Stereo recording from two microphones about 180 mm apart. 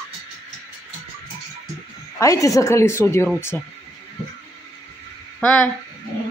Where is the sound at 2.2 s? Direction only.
15° left (ahead or behind).